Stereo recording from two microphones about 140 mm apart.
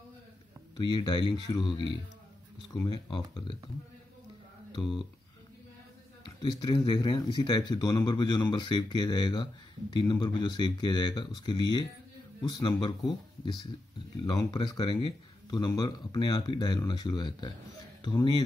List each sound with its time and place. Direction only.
0.7 s speech: 30° left (ahead or behind)
2.7 s speech: 30° left (ahead or behind)
4.8 s speech: 5° left (ahead or behind)
6.4 s speech: 30° left (ahead or behind)
14.2 s speech: 30° left (ahead or behind)
15.6 s speech: 25° left (ahead or behind)